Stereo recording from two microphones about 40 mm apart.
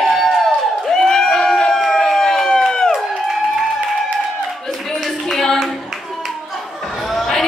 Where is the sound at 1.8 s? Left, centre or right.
Centre.